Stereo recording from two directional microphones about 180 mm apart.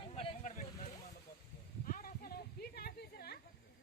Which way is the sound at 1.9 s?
55° left (ahead or behind).